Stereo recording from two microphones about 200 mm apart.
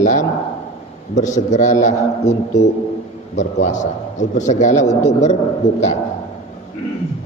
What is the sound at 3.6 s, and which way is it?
A man's voice, 40° left (ahead or behind).